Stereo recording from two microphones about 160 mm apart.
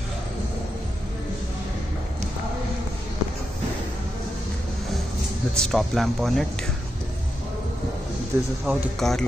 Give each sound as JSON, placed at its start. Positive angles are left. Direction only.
{"t": 5.6, "sound": "speech", "side_deg": 0}
{"t": 8.3, "sound": "speech", "side_deg": -15}
{"t": 8.6, "sound": "speech", "side_deg": 0}